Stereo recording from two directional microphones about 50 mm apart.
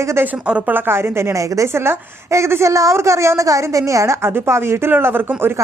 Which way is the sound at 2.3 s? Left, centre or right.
Right.